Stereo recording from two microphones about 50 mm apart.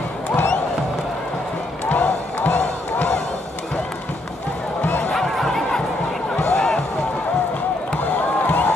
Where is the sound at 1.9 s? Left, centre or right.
Left.